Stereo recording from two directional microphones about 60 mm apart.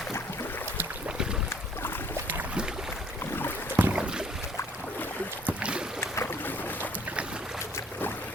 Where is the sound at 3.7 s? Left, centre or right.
Right.